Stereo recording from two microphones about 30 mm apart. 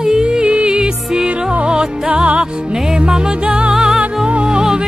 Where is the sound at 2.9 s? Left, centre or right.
Right.